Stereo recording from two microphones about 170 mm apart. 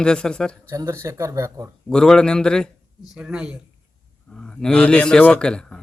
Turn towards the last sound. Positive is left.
turn(degrees=5)  # may be behind; listen again after turning